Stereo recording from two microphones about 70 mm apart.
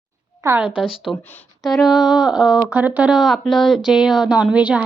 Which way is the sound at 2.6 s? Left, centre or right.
Right.